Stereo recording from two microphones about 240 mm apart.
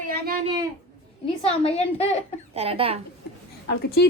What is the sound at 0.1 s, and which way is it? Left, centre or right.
Speech, right.